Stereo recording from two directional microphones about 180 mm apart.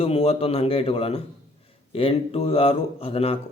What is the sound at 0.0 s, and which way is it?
A man's voice, 35° left (ahead or behind).